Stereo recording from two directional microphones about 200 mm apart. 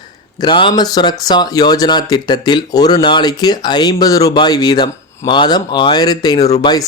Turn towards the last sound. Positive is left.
turn(degrees=20)  # may be behind; listen again after turning